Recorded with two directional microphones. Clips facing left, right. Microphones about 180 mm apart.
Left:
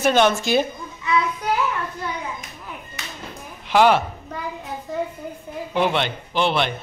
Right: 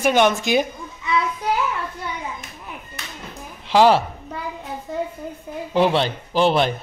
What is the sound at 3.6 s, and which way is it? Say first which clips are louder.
Speech: right 1 dB; 30° right (ahead or behind).